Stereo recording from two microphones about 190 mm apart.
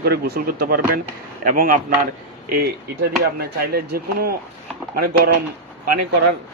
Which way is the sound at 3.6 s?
55° right (ahead or behind).